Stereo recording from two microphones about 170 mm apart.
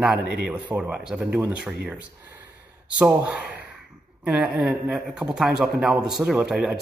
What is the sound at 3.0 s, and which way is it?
Speech, 5° right (ahead or behind).